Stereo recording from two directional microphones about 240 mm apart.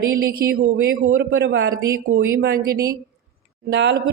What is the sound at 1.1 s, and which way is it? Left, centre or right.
Speech, right.